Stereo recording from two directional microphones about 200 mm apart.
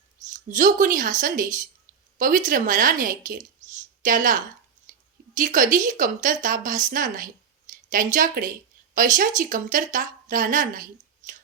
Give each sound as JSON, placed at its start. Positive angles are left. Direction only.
{"t": 0.5, "sound": "a woman's voice", "side_deg": -40}